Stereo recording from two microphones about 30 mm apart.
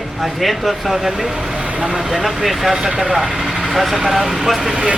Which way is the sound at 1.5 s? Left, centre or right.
Right.